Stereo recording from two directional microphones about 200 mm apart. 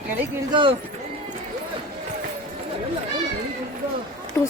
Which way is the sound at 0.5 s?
25° right (ahead or behind).